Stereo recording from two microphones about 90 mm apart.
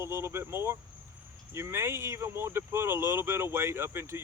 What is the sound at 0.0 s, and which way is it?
Speech, 30° right (ahead or behind).